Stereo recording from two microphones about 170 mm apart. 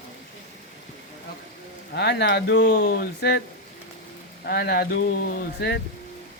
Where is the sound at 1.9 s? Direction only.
85° left.